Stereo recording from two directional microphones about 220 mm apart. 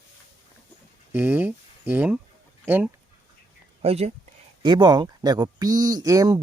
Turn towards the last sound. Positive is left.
turn(degrees=-15)  # may be behind; listen again after turning